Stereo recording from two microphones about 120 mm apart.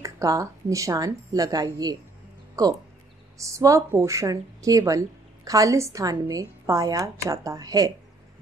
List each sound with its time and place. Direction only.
0.0 s a woman's voice: 25° right (ahead or behind)